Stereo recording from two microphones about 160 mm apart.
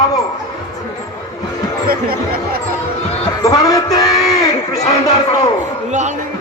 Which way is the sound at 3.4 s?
20° left (ahead or behind).